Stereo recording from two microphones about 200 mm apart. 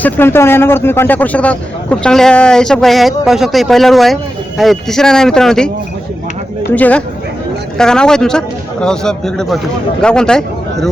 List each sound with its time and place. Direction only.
0.0 s speech: 10° left (ahead or behind)